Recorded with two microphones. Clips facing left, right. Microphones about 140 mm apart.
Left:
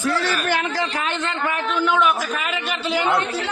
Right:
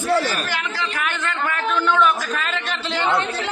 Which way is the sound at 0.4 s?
50° left (ahead or behind).